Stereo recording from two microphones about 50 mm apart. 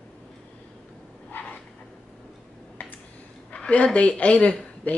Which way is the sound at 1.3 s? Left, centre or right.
Left.